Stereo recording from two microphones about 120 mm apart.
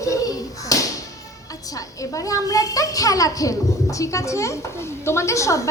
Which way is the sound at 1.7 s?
30° left (ahead or behind).